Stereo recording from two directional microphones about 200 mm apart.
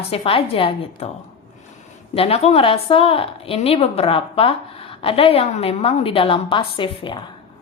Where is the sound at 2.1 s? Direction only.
30° left (ahead or behind).